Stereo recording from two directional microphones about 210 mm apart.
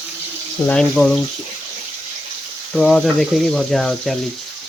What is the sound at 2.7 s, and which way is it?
Speech, centre (ahead or behind).